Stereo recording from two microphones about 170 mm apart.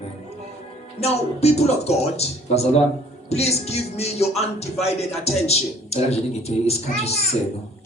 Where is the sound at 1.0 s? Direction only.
40° left (ahead or behind).